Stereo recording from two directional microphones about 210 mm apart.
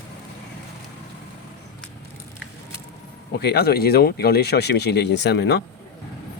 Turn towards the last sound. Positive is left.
turn(degrees=55)  # may be behind; listen again after turning